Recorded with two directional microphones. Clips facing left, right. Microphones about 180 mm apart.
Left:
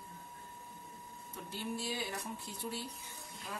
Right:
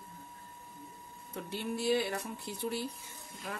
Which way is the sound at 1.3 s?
65° right (ahead or behind).